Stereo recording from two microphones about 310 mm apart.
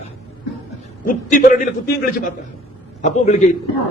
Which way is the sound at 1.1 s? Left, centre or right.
Left.